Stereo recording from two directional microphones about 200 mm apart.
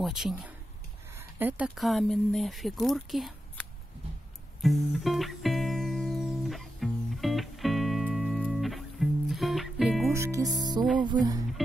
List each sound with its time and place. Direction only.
0.0 s speech: centre (ahead or behind)
4.6 s music: centre (ahead or behind)
10.1 s speech: 15° right (ahead or behind)